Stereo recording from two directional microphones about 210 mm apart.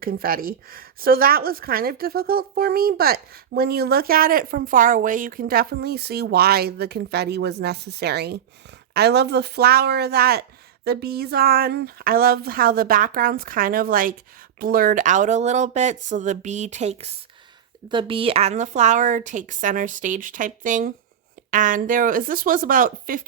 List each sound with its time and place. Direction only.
0.0 s a woman's voice: 45° right (ahead or behind)